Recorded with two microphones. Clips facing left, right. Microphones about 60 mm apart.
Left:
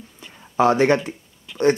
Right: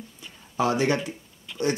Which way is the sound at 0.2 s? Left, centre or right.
Left.